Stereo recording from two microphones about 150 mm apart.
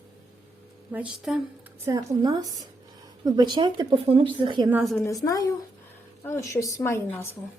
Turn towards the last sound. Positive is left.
turn(degrees=20)  # may be behind; listen again after turning